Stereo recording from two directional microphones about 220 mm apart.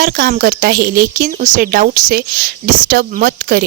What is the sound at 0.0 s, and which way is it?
A woman's voice, 40° right (ahead or behind).